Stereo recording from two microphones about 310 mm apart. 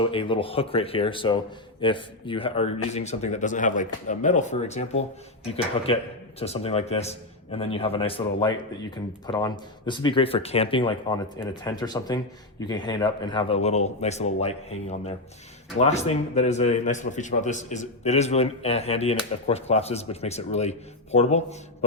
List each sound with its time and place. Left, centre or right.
0.0 s a man's voice: centre